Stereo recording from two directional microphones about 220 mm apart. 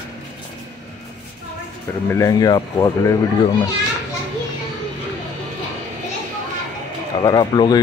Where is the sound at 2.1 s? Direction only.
15° left (ahead or behind).